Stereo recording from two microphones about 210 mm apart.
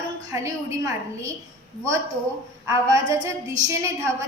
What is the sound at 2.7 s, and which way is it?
A woman's voice, 15° right (ahead or behind).